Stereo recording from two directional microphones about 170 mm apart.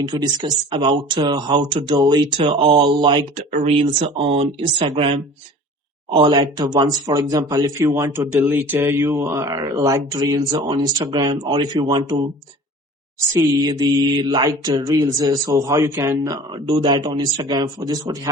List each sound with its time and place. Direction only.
0.0 s mantra: 25° right (ahead or behind)
3.5 s speech: 35° right (ahead or behind)
6.1 s mantra: 25° right (ahead or behind)
13.3 s mantra: 20° right (ahead or behind)